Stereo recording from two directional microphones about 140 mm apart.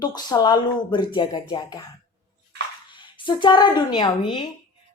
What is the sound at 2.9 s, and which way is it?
Speech, 35° left (ahead or behind).